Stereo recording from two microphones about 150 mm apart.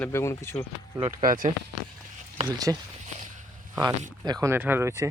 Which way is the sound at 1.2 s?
65° right (ahead or behind).